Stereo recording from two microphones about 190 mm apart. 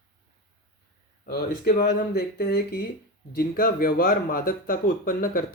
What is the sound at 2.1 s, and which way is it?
Speech, 55° left (ahead or behind).